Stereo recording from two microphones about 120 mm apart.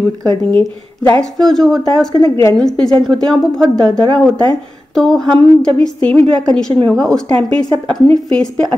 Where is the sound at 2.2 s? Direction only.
25° left (ahead or behind).